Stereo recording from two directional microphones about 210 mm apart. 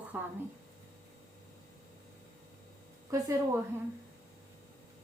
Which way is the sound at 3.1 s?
15° right (ahead or behind).